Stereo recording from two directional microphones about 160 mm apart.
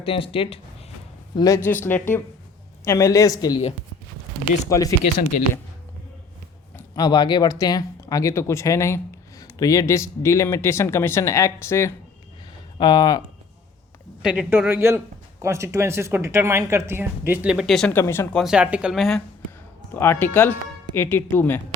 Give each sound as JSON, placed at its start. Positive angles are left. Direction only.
{"t": 0.0, "sound": "speech", "side_deg": 35}
{"t": 1.4, "sound": "speech", "side_deg": 20}
{"t": 4.7, "sound": "speech", "side_deg": 20}
{"t": 6.7, "sound": "speech", "side_deg": 25}
{"t": 12.8, "sound": "speech", "side_deg": 25}
{"t": 14.2, "sound": "speech", "side_deg": -5}
{"t": 17.9, "sound": "speech", "side_deg": 15}
{"t": 18.3, "sound": "speech", "side_deg": -5}
{"t": 20.0, "sound": "speech", "side_deg": 15}